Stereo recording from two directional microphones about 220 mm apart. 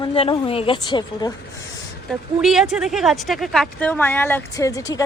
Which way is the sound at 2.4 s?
Centre (ahead or behind).